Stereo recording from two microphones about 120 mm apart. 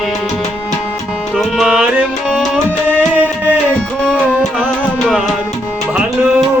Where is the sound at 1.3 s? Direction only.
Centre (ahead or behind).